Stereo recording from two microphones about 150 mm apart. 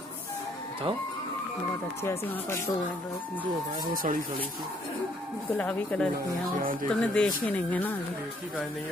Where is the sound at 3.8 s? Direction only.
70° right (ahead or behind).